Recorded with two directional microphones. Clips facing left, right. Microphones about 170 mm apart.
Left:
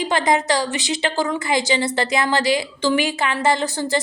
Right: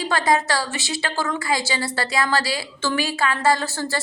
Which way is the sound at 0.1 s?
20° left (ahead or behind).